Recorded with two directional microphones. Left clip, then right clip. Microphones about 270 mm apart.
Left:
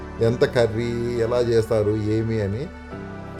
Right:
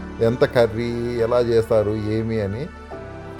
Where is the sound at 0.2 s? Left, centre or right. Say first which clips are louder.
Right 2 dB; centre.